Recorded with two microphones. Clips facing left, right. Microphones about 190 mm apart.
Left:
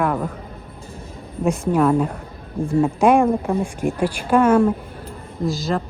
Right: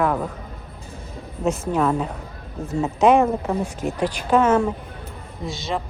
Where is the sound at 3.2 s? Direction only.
Centre (ahead or behind).